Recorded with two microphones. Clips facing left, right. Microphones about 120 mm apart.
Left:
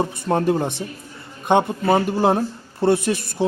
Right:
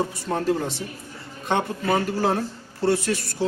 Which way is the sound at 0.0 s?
55° left (ahead or behind).